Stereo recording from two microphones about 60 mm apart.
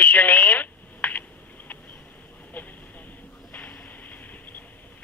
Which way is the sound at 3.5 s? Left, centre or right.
Left.